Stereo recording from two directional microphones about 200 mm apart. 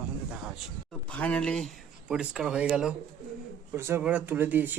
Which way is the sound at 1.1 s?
5° left (ahead or behind).